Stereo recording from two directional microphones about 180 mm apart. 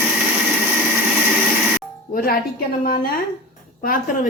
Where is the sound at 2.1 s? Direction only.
55° left (ahead or behind).